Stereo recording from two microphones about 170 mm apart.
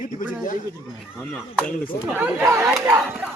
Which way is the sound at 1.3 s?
5° left (ahead or behind).